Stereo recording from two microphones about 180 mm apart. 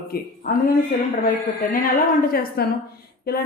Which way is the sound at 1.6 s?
50° left (ahead or behind).